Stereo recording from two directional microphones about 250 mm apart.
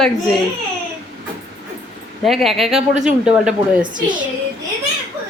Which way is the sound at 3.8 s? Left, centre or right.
Centre.